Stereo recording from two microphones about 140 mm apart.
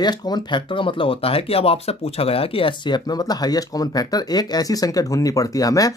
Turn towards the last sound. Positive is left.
turn(degrees=25)  # may be behind; listen again after turning